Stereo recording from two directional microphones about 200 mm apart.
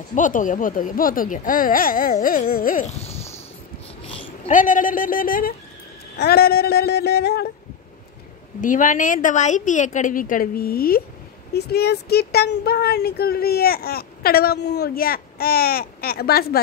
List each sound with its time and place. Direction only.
0.1 s speech: 40° left (ahead or behind)
4.0 s babbling: 25° left (ahead or behind)
4.5 s speech: 40° left (ahead or behind)
8.5 s a woman's voice: 40° left (ahead or behind)